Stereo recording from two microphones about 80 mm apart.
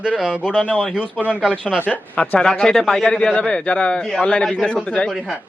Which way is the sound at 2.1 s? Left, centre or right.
Centre.